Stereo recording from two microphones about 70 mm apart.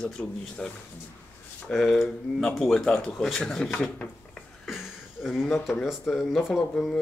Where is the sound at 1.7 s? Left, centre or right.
Centre.